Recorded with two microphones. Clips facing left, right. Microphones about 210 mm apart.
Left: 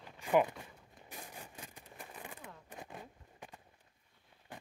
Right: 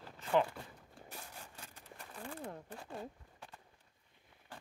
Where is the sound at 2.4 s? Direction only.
35° right (ahead or behind).